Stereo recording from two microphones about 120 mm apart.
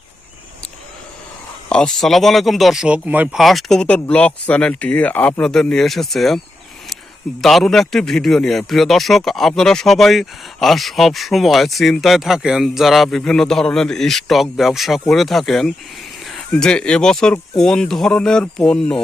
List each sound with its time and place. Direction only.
1.7 s a man's voice: 5° left (ahead or behind); by 3.2 s 10° right (ahead or behind)
3.3 s speech: centre (ahead or behind)
7.4 s a man's voice: 5° left (ahead or behind)